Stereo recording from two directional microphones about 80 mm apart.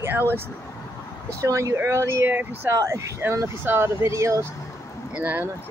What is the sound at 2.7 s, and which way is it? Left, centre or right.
Speech, right.